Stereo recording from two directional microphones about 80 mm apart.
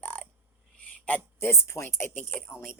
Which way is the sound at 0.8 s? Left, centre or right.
Centre.